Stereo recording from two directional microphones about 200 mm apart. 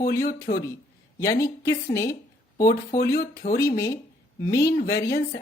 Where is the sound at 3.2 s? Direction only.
50° left (ahead or behind).